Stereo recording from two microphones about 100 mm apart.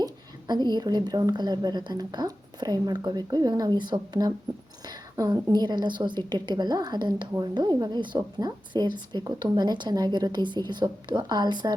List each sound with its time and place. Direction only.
0.0 s a woman's voice: 45° right (ahead or behind)